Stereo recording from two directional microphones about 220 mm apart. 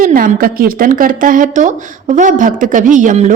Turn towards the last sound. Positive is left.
turn(degrees=-35)  # may be behind; listen again after turning